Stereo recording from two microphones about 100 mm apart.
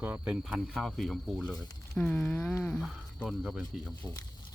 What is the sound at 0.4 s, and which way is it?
Speech, centre (ahead or behind).